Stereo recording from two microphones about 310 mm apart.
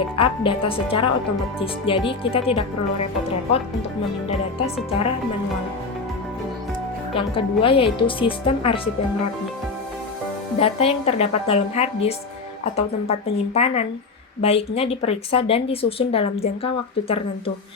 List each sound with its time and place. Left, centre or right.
0.2 s speech: centre
4.3 s speech: centre
7.3 s speech: centre
10.6 s speech: centre